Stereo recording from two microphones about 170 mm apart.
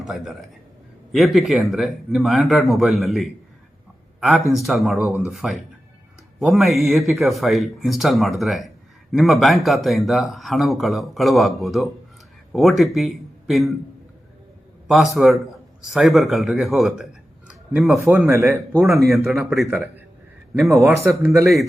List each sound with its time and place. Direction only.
0.0 s speech: centre (ahead or behind)
14.8 s speech: centre (ahead or behind)
17.5 s a sound: 5° right (ahead or behind)
18.1 s a man's voice: 15° right (ahead or behind)
19.2 s speech: centre (ahead or behind)
20.7 s a man's voice: 15° right (ahead or behind)